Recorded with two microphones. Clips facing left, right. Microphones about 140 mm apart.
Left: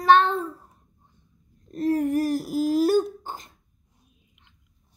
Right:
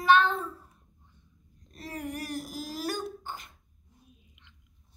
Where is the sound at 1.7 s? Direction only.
45° left (ahead or behind).